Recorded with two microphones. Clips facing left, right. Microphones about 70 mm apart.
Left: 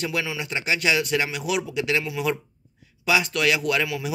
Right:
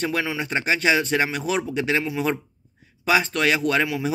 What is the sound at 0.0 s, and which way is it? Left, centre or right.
A man's voice, right.